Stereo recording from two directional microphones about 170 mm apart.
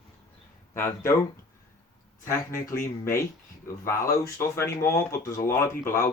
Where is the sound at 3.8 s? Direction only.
15° left (ahead or behind).